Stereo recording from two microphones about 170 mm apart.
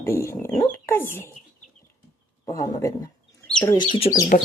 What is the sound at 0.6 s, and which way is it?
Dog, 15° left (ahead or behind).